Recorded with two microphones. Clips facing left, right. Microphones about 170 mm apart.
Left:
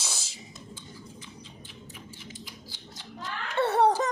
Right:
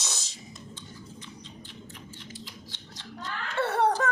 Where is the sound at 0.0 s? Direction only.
10° left (ahead or behind).